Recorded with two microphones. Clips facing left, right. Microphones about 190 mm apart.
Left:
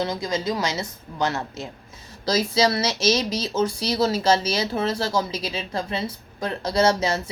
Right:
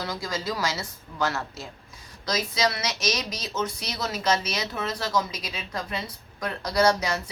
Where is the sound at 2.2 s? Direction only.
30° left (ahead or behind).